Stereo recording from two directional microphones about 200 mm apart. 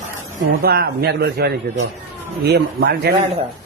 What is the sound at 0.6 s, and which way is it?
A man's voice, 50° right (ahead or behind).